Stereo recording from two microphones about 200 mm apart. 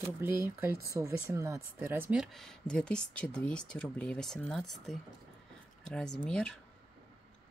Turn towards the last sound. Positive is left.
turn(degrees=5)  # may be behind; listen again after turning